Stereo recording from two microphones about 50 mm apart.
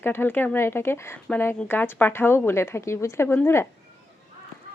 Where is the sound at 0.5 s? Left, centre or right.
Left.